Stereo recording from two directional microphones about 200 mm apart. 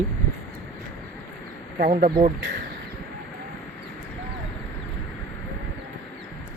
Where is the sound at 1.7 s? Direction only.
45° right (ahead or behind).